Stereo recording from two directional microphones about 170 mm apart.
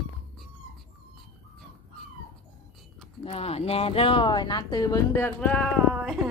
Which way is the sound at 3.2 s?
35° left (ahead or behind).